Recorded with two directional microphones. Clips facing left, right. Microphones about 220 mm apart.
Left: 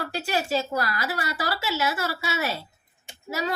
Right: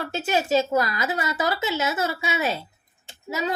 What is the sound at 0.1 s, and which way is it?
A woman's voice, 20° right (ahead or behind).